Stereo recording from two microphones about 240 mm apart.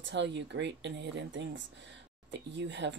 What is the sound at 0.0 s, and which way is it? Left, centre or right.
Speech, right.